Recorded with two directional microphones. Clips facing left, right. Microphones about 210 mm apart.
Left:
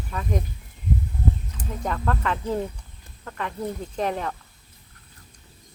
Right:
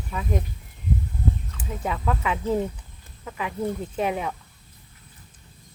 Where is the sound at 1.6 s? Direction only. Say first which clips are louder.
Even; 5° right (ahead or behind).